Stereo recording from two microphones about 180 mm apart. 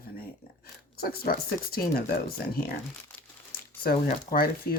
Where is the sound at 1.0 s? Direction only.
55° left (ahead or behind).